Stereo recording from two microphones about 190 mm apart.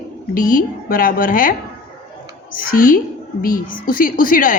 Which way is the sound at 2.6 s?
50° left (ahead or behind).